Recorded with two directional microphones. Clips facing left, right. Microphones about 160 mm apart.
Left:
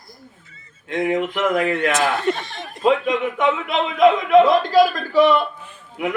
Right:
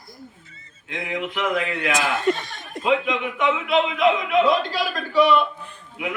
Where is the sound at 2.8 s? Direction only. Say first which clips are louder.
Left 4 dB; 45° left (ahead or behind).